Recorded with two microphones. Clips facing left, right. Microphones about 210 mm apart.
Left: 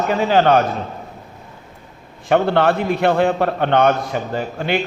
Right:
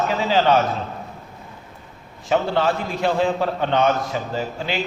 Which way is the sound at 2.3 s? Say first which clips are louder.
Left 4 dB; 60° left (ahead or behind).